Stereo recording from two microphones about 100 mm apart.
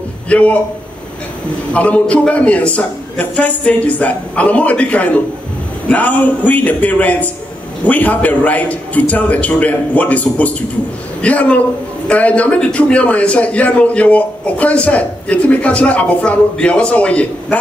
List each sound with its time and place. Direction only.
0.3 s a man's voice: 15° left (ahead or behind)
1.7 s a man's voice: 15° left (ahead or behind)